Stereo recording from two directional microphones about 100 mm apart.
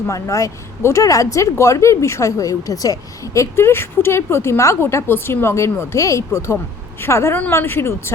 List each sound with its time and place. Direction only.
0.1 s speech: 35° left (ahead or behind)